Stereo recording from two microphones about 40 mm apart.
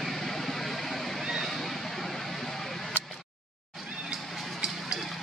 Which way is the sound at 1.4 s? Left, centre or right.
Centre.